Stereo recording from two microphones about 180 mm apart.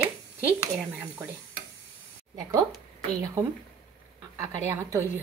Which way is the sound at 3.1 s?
20° right (ahead or behind).